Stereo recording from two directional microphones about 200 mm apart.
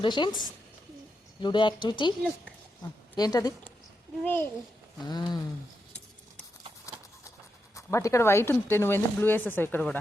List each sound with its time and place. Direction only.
0.0 s speech: 25° left (ahead or behind)
3.2 s speech: 20° left (ahead or behind)
5.0 s speech: 20° left (ahead or behind)
7.8 s speech: 15° left (ahead or behind)